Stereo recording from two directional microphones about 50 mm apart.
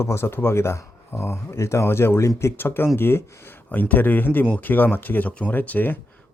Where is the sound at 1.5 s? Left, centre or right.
Left.